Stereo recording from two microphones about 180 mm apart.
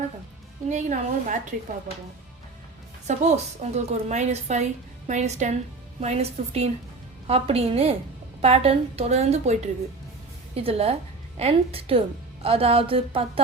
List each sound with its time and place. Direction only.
0.7 s a woman's voice: 45° right (ahead or behind)
3.1 s a woman's voice: 40° right (ahead or behind)